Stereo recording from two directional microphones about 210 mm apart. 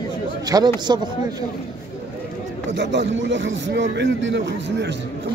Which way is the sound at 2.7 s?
55° right (ahead or behind).